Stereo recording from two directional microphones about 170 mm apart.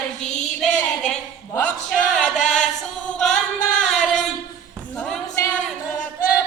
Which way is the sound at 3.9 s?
5° left (ahead or behind).